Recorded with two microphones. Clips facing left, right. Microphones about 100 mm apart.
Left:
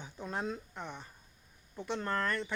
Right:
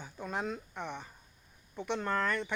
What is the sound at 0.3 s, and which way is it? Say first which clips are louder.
Speech: right 1 dB; 10° right (ahead or behind).